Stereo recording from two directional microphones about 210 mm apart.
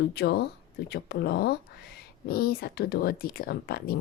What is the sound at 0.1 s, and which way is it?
Speech, 50° left (ahead or behind).